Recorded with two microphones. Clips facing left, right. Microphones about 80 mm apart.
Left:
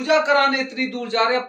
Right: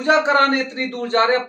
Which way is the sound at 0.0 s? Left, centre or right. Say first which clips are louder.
Right 1 dB; right.